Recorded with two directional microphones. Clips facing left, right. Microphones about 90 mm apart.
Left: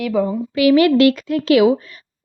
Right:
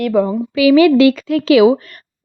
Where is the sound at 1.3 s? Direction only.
90° right.